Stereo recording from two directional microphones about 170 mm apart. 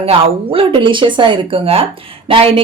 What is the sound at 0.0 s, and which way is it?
Speech, 35° right (ahead or behind).